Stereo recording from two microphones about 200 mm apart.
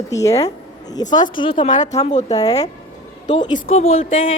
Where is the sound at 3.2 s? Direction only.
25° left (ahead or behind).